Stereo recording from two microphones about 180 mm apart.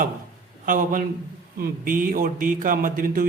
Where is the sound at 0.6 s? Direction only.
50° right (ahead or behind).